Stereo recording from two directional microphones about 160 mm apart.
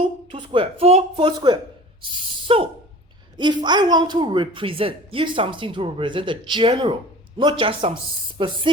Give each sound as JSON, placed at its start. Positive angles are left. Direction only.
{"t": 0.3, "sound": "a woman's voice", "side_deg": -30}